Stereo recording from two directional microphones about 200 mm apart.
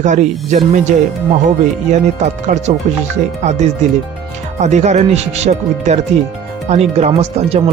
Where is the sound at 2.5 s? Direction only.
35° right (ahead or behind).